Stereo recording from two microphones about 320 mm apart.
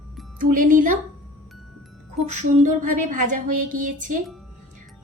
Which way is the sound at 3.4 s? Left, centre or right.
Right.